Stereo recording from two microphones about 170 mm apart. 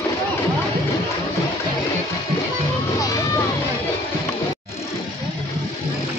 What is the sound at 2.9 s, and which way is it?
Music, 20° left (ahead or behind).